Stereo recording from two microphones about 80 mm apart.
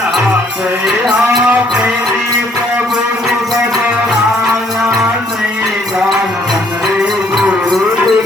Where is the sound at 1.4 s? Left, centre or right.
Centre.